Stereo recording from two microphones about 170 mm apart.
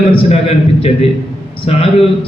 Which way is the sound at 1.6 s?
35° left (ahead or behind).